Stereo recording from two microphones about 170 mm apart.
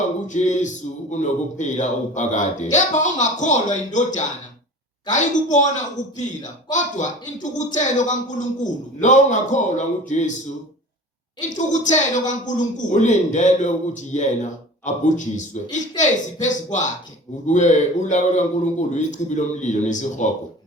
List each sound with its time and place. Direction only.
0.3 s speech: 45° left (ahead or behind)
11.3 s speech: 45° left (ahead or behind)